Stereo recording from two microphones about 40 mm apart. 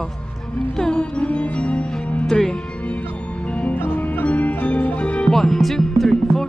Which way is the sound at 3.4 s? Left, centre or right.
Left.